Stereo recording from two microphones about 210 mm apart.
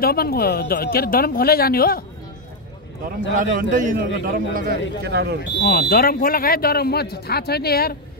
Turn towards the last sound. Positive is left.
turn(degrees=45)  # may be behind; listen again after turning